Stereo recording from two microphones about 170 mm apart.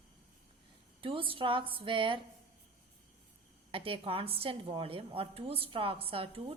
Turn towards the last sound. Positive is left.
turn(degrees=-30)  # may be behind; listen again after turning